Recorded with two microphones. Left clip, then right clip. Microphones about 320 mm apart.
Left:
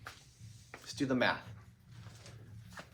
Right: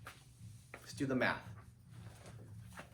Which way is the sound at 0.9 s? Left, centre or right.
Centre.